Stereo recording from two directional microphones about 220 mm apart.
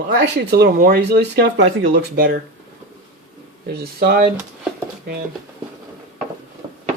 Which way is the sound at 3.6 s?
45° right (ahead or behind).